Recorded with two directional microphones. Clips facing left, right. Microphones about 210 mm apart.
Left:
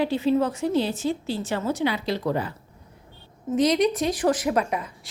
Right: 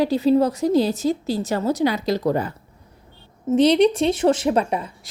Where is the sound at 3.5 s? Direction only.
30° right (ahead or behind).